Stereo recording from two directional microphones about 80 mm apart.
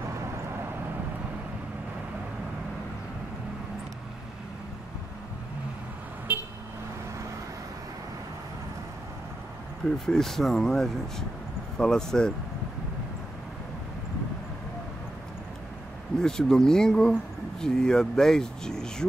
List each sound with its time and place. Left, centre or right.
6.3 s vehicle: right
9.9 s speech: centre
16.2 s speech: centre